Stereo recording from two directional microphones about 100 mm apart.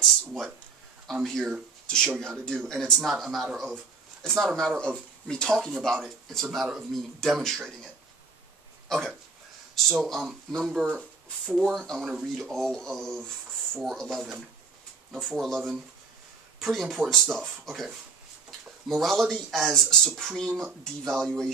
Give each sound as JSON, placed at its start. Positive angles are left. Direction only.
{"t": 1.0, "sound": "speech", "side_deg": 5}